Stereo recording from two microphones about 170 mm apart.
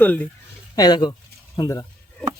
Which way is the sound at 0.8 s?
25° left (ahead or behind).